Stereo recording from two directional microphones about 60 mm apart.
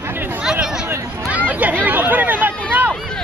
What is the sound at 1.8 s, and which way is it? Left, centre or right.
Hubbub, right.